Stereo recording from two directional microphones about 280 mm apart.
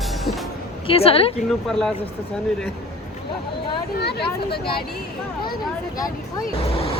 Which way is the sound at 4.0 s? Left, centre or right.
Left.